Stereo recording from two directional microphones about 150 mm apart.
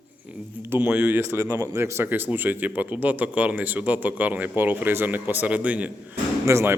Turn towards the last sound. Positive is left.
turn(degrees=-20)  # may be behind; listen again after turning